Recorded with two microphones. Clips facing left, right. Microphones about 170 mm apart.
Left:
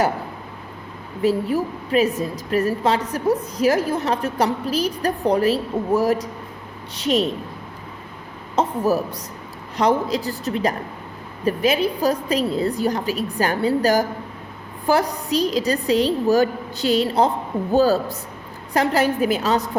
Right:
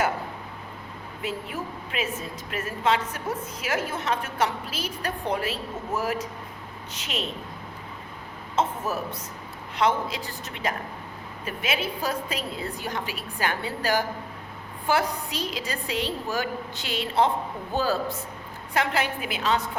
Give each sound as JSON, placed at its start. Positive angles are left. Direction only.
{"t": 1.2, "sound": "a woman's voice", "side_deg": 40}
{"t": 8.5, "sound": "a woman's voice", "side_deg": 35}